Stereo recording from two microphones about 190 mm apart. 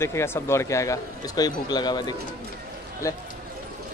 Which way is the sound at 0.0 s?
15° left (ahead or behind).